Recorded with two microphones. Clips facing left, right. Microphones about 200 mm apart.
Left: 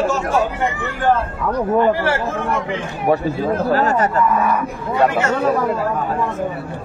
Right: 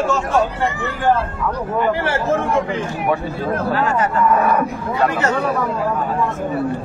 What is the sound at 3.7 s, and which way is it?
Speech, 40° left (ahead or behind).